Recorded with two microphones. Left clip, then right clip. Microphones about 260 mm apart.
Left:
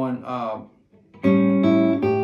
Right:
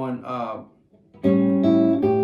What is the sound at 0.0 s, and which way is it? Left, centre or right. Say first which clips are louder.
Speech: left 1 dB; centre.